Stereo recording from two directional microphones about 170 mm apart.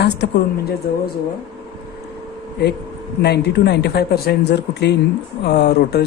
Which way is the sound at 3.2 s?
75° left (ahead or behind).